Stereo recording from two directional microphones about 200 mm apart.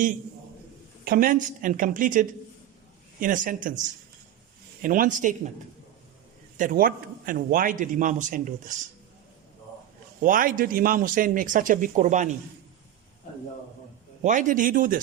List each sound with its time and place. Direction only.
1.0 s speech: 45° right (ahead or behind)
4.8 s a man's voice: 40° right (ahead or behind)
6.6 s speech: 45° right (ahead or behind)
10.2 s speech: 40° right (ahead or behind)
14.2 s a man's voice: 40° right (ahead or behind)